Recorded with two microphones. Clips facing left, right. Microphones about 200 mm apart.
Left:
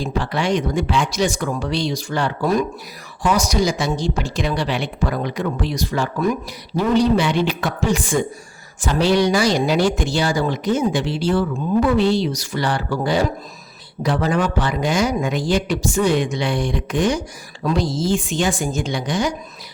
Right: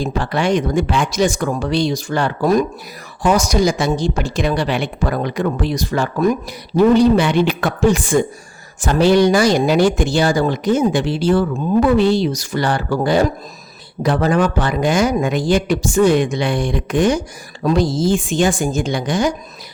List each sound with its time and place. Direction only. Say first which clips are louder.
0.0 s speech: right 3 dB; 50° right (ahead or behind)